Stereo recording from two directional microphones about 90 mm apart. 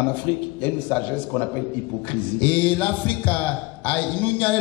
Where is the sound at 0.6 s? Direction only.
20° left (ahead or behind).